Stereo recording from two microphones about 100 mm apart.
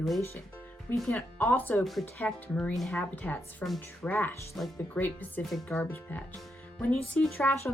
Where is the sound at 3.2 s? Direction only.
10° left (ahead or behind).